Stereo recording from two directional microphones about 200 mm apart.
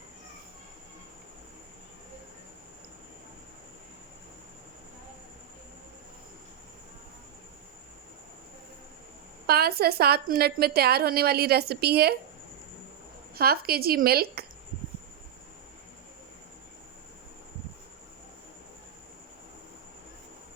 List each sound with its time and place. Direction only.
9.5 s a woman's voice: 50° right (ahead or behind)
13.3 s a woman's voice: 50° right (ahead or behind)